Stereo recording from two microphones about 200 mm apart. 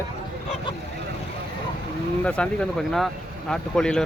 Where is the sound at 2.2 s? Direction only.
5° left (ahead or behind).